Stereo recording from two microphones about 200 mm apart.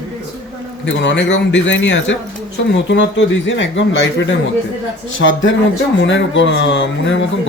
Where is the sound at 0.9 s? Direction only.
65° left (ahead or behind).